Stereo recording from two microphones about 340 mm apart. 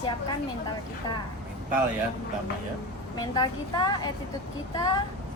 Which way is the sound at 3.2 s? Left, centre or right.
Centre.